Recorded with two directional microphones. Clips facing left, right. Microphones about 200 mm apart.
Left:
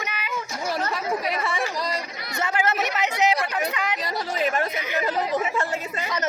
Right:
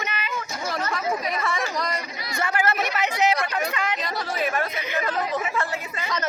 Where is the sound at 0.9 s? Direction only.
30° left (ahead or behind).